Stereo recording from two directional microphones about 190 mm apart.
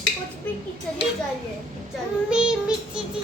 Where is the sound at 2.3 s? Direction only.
5° right (ahead or behind).